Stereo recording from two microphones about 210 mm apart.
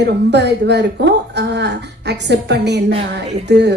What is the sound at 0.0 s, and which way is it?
A woman's voice, 55° right (ahead or behind).